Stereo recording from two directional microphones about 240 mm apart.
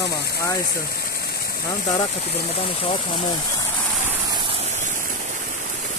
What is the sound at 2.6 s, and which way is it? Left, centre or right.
Speech, left.